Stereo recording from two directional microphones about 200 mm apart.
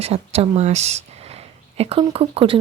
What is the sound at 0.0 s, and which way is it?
Speech, 30° right (ahead or behind).